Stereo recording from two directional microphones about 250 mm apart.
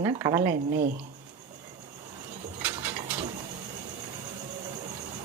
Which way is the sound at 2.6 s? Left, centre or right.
Centre.